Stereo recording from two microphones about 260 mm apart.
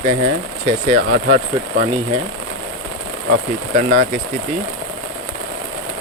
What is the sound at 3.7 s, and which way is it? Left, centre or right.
Speech, right.